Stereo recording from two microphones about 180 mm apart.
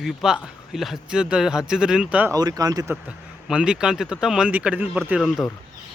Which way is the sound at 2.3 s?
20° right (ahead or behind).